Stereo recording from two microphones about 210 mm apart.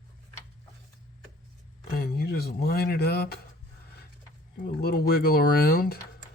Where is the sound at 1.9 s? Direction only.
45° left (ahead or behind).